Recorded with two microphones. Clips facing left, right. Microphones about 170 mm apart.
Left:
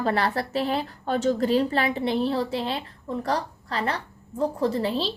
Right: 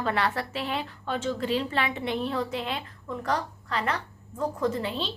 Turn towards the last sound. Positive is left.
turn(degrees=35)  # may be behind; listen again after turning